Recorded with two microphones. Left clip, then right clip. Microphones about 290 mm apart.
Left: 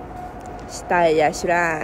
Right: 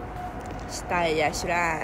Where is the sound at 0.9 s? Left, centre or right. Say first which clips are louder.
Left 8 dB; left.